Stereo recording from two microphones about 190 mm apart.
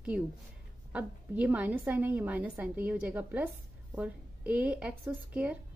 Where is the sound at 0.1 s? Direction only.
5° right (ahead or behind).